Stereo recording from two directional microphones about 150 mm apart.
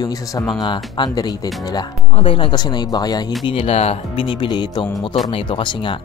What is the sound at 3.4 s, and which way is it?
Speech, 40° left (ahead or behind).